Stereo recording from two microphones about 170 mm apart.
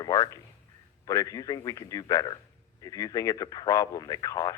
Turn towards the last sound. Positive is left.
turn(degrees=20)  # may be behind; listen again after turning